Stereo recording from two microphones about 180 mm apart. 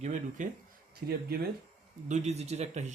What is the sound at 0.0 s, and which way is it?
Speech, 45° right (ahead or behind).